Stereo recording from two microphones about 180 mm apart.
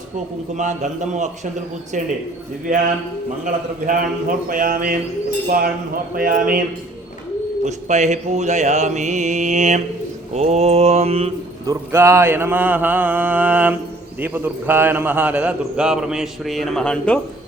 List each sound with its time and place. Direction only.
0.5 s a man's voice: 40° right (ahead or behind)
2.7 s a man's voice: 45° right (ahead or behind)
7.6 s mantra: 40° right (ahead or behind)
11.6 s mantra: 15° right (ahead or behind)
14.2 s a man's voice: 10° right (ahead or behind); by 17.2 s 5° left (ahead or behind)